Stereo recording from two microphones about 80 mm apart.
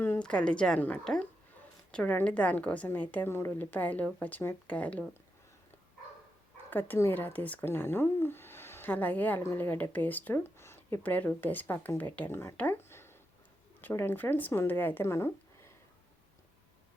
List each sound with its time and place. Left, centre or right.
0.2 s a woman's voice: centre
1.9 s a woman's voice: centre
3.2 s speech: left
6.7 s speech: left
11.0 s speech: left
12.9 s a sound: left
13.8 s speech: left
15.0 s a sound: left